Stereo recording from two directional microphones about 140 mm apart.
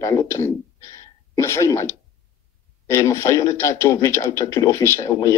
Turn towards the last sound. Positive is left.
turn(degrees=20)  # may be behind; listen again after turning